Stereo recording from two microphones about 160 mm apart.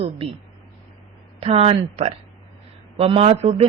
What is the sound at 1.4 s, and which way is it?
Speech, 40° right (ahead or behind).